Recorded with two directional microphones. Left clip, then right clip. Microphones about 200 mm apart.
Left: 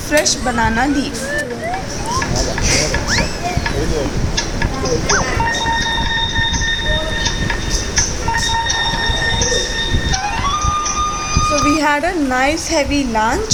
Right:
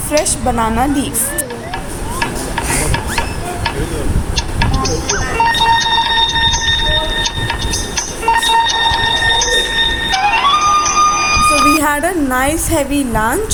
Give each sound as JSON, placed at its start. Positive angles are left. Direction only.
{"t": 0.6, "sound": "speech", "side_deg": -15}
{"t": 4.4, "sound": "music", "side_deg": -50}
{"t": 7.2, "sound": "train", "side_deg": -50}
{"t": 10.1, "sound": "music", "side_deg": -50}
{"t": 11.8, "sound": "speech", "side_deg": -15}